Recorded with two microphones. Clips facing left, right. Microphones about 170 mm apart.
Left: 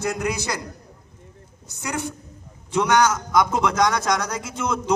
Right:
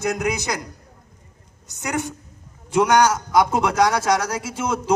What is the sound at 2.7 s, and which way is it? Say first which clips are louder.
A man's voice: right 2 dB; 10° right (ahead or behind).